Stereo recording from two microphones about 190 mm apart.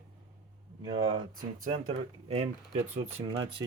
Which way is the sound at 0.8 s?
20° right (ahead or behind).